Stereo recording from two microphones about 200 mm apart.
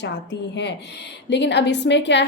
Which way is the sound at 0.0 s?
60° left (ahead or behind).